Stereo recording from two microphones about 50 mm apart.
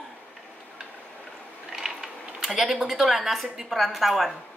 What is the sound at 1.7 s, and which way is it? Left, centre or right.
A woman's voice, centre.